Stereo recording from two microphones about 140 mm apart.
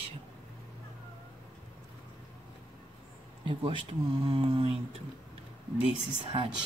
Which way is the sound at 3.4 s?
35° right (ahead or behind).